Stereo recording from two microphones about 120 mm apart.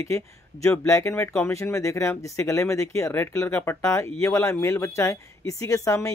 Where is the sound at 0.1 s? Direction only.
25° left (ahead or behind).